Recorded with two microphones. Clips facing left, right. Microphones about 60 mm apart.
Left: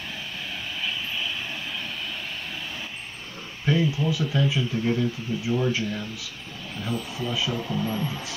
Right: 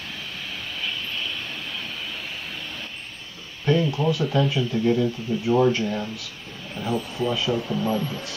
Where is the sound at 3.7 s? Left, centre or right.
Centre.